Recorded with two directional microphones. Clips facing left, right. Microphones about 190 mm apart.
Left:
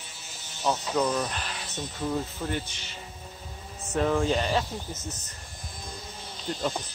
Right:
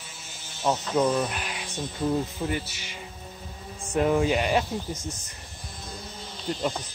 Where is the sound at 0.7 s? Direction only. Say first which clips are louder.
Right 3 dB; 10° right (ahead or behind).